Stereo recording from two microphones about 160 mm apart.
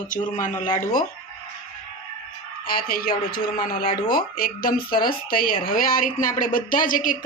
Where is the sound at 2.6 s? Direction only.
65° left (ahead or behind).